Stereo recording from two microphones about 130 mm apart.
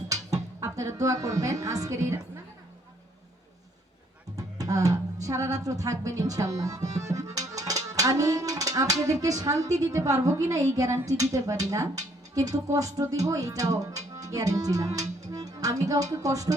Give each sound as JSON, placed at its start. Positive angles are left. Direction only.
{"t": 0.1, "sound": "a sound", "side_deg": -25}
{"t": 1.6, "sound": "a woman's voice", "side_deg": -25}
{"t": 4.4, "sound": "a woman's voice", "side_deg": -25}
{"t": 15.2, "sound": "music", "side_deg": -25}